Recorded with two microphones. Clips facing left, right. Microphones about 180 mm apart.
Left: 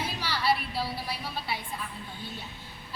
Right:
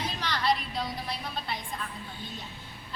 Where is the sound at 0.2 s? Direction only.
5° left (ahead or behind).